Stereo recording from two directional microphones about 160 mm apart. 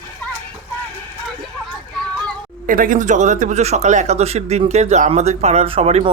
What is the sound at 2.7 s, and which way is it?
Speech, 60° right (ahead or behind).